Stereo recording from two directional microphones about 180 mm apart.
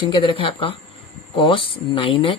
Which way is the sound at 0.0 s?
25° left (ahead or behind).